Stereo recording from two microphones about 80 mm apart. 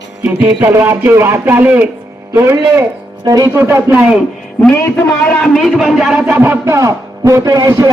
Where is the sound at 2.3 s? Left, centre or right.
Right.